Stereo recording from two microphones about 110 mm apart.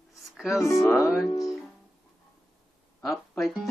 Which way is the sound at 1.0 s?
Centre (ahead or behind).